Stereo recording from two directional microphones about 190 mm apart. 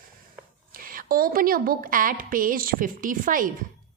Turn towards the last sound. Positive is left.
turn(degrees=-45)  # may be behind; listen again after turning